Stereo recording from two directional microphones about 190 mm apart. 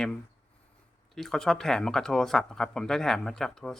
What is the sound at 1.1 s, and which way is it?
Speech, centre (ahead or behind).